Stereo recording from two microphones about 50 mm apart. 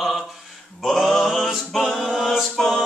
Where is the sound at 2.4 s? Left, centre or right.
Centre.